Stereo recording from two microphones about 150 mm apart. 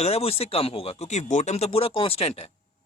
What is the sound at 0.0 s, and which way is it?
A man's voice, 45° left (ahead or behind).